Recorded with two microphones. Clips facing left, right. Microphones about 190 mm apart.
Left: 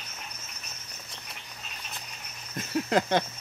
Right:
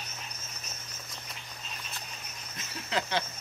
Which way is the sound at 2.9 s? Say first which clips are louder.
Left 6 dB; 50° left (ahead or behind).